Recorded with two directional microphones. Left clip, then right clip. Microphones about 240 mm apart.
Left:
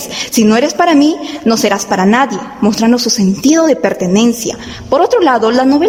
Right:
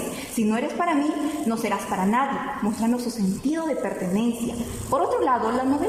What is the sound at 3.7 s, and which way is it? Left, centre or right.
Speech, left.